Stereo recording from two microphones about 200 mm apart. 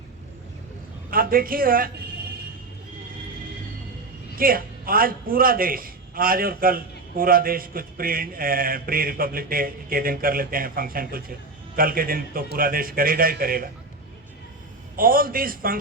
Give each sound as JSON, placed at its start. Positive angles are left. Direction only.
{"t": 1.1, "sound": "a man's voice", "side_deg": -45}
{"t": 4.4, "sound": "a man's voice", "side_deg": -45}
{"t": 14.9, "sound": "a man's voice", "side_deg": -45}